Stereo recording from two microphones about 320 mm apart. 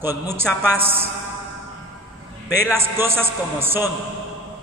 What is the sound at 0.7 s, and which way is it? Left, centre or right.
Speech, centre.